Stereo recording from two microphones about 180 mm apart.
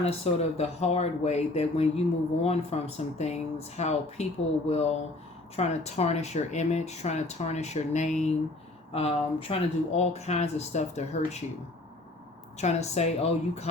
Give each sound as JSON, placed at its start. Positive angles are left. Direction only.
{"t": 0.0, "sound": "speech", "side_deg": 35}
{"t": 12.5, "sound": "speech", "side_deg": 40}